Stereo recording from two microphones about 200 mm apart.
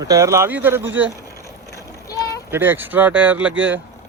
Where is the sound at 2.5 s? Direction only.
10° right (ahead or behind).